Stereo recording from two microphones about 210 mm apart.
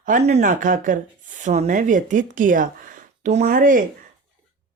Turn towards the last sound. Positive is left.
turn(degrees=-40)  # may be behind; listen again after turning